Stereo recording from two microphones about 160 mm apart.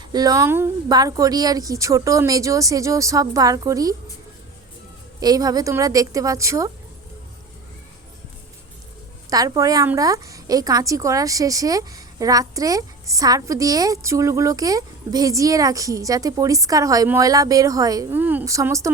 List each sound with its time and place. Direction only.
0.0 s a woman's voice: 25° right (ahead or behind)
5.2 s a woman's voice: 25° right (ahead or behind)
9.3 s a woman's voice: 20° right (ahead or behind)